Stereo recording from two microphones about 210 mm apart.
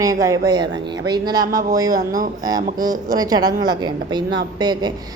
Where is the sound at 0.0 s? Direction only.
15° right (ahead or behind).